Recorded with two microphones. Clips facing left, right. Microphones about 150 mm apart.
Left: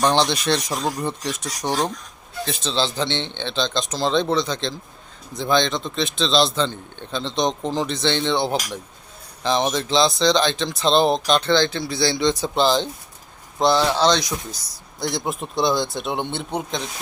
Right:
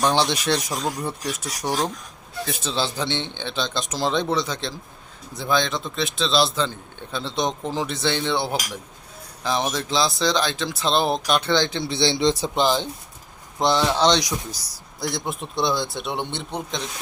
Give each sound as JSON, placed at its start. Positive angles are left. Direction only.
{"t": 0.1, "sound": "a man's voice", "side_deg": -10}
{"t": 12.5, "sound": "speech", "side_deg": -15}
{"t": 13.9, "sound": "speech", "side_deg": -15}
{"t": 15.0, "sound": "a man's voice", "side_deg": 0}